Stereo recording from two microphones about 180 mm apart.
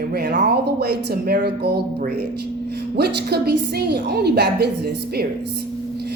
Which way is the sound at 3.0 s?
65° right (ahead or behind).